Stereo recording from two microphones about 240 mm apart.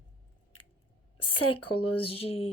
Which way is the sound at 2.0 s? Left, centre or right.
Left.